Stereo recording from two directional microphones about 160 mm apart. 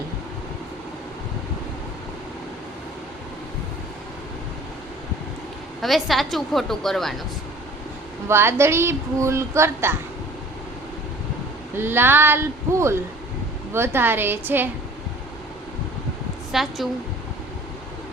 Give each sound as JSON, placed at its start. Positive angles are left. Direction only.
{"t": 5.8, "sound": "a woman's voice", "side_deg": 0}
{"t": 8.3, "sound": "speech", "side_deg": -15}
{"t": 11.8, "sound": "speech", "side_deg": -15}
{"t": 16.5, "sound": "a woman's voice", "side_deg": 0}